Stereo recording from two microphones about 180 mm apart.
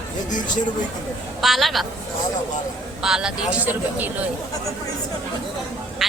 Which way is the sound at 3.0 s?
5° right (ahead or behind).